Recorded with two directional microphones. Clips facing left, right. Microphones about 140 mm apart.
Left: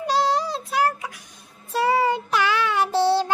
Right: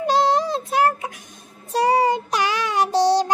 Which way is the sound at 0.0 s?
55° right (ahead or behind).